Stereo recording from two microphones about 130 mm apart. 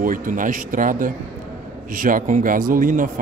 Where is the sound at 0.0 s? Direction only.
90° right.